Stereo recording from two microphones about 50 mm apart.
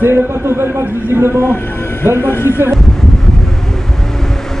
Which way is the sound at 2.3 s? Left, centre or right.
Left.